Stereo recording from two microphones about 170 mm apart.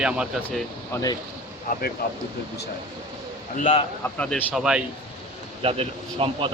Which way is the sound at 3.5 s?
45° left (ahead or behind).